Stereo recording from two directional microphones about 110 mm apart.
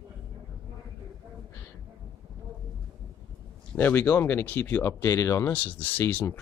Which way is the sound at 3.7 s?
15° left (ahead or behind).